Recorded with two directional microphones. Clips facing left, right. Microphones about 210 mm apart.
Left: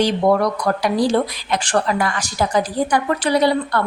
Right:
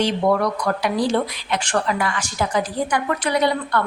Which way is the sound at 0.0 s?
35° left (ahead or behind).